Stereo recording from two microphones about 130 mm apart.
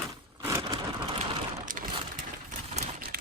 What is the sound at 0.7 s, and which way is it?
Rain on surface, 40° right (ahead or behind).